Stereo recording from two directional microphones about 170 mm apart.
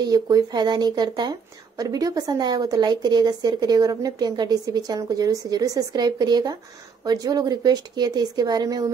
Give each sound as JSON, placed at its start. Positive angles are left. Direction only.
{"t": 0.0, "sound": "a woman's voice", "side_deg": -20}